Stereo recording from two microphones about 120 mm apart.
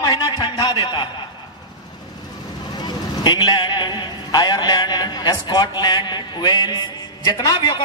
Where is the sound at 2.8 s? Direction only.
35° left (ahead or behind).